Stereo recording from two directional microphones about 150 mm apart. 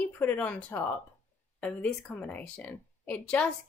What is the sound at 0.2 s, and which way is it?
A woman's voice, 10° left (ahead or behind).